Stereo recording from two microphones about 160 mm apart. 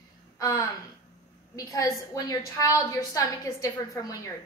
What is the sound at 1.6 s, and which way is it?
A woman's voice, 20° left (ahead or behind).